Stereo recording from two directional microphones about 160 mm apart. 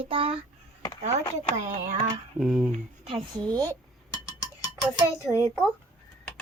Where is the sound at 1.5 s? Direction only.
55° right (ahead or behind).